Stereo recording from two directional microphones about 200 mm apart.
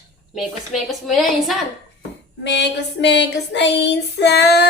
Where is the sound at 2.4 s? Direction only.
60° left (ahead or behind).